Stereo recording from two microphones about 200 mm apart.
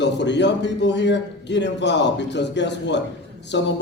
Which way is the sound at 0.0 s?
60° left (ahead or behind).